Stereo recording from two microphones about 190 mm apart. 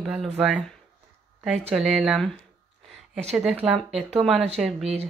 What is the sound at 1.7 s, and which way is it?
Speech, centre (ahead or behind).